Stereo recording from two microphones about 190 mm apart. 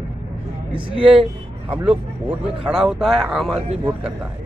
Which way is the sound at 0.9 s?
5° right (ahead or behind).